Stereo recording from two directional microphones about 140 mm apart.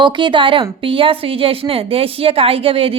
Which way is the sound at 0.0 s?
35° right (ahead or behind).